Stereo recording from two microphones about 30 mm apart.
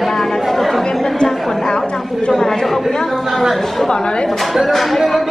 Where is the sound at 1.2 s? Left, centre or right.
Left.